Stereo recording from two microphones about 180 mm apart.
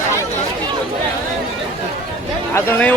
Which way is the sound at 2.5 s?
10° left (ahead or behind).